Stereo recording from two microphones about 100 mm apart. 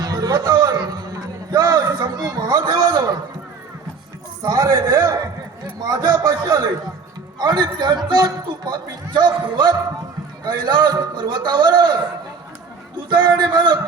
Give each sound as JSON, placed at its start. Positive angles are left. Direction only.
{"t": 0.0, "sound": "a sound", "side_deg": -40}
{"t": 4.4, "sound": "a man's voice", "side_deg": -35}
{"t": 13.1, "sound": "a man's voice", "side_deg": -50}